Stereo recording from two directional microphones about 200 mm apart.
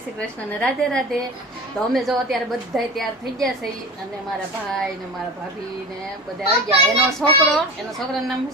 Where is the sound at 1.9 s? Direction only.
Centre (ahead or behind).